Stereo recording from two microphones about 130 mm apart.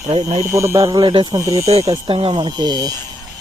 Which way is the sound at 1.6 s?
55° right (ahead or behind).